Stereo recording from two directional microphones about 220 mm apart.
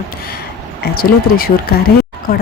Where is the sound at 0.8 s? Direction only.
45° left (ahead or behind).